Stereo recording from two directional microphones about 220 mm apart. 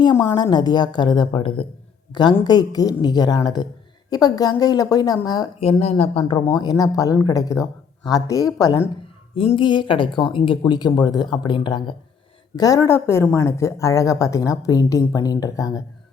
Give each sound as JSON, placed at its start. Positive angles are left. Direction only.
{"t": 0.0, "sound": "a woman's voice", "side_deg": 20}